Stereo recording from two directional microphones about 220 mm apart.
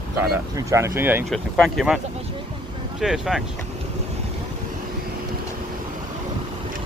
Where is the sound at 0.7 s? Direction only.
15° right (ahead or behind).